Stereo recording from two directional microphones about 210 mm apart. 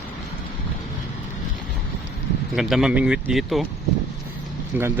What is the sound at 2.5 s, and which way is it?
Speech, centre (ahead or behind).